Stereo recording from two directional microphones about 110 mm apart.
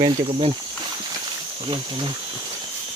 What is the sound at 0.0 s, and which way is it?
Speech, 55° right (ahead or behind).